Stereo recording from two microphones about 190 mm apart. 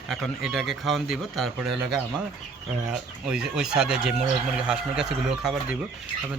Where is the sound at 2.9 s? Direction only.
5° right (ahead or behind).